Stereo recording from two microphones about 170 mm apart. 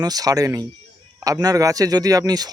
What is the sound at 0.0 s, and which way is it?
A man's voice, 20° right (ahead or behind).